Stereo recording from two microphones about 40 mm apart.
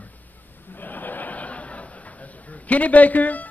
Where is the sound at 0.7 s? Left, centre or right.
Left.